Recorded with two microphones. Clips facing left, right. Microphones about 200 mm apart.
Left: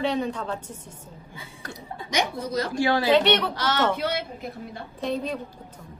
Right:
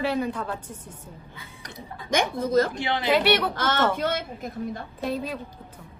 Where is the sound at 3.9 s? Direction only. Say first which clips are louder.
Right 1 dB; 45° right (ahead or behind).